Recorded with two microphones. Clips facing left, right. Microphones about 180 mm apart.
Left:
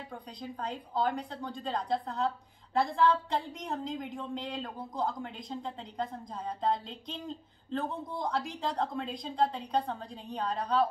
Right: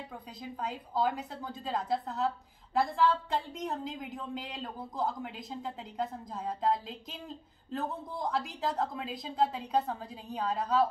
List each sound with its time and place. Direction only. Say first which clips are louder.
0.1 s a woman's voice: left 1 dB; 5° right (ahead or behind)